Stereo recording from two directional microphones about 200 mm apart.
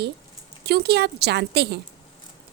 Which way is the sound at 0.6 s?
55° right (ahead or behind).